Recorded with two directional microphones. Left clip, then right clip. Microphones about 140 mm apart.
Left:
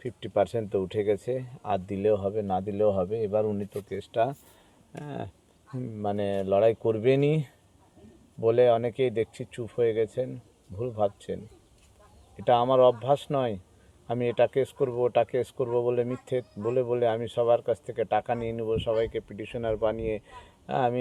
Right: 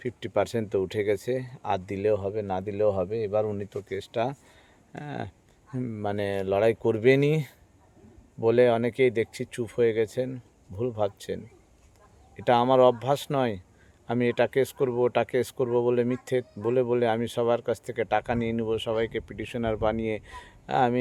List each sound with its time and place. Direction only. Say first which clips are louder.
0.0 s speech: left 1 dB; 30° right (ahead or behind)
12.5 s speech: right 1 dB; 35° right (ahead or behind)